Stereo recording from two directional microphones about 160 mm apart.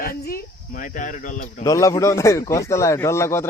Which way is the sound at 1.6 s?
20° left (ahead or behind).